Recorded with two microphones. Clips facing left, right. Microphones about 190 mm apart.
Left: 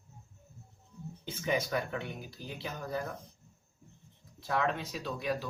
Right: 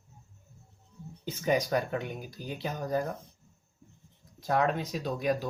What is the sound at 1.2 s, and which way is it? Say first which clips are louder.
Speech: right 4 dB; 40° right (ahead or behind).